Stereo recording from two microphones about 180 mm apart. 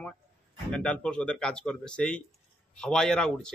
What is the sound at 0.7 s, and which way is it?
Speech, 5° left (ahead or behind).